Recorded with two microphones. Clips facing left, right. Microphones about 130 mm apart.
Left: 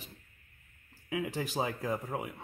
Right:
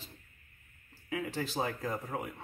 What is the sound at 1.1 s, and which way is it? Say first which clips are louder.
Speech: left 1 dB; 15° left (ahead or behind).